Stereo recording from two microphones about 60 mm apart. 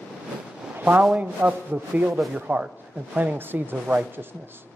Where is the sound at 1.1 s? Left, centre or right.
Right.